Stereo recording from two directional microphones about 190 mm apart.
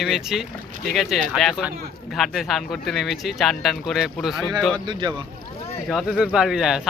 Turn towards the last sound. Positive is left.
turn(degrees=-5)  # may be behind; listen again after turning